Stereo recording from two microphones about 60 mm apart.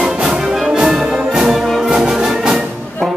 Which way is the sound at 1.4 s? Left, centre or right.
Centre.